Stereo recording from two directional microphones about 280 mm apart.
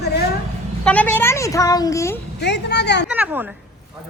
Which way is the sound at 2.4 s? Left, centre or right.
Left.